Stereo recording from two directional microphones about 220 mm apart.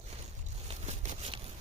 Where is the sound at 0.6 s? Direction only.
30° right (ahead or behind).